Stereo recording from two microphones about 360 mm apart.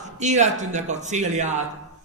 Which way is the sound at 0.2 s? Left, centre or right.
Centre.